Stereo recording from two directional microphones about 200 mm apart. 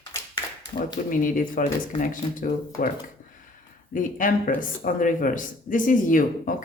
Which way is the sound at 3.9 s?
40° left (ahead or behind).